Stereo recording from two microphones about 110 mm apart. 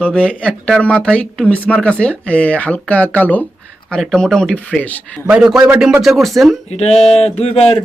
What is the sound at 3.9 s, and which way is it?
Speech, 5° left (ahead or behind).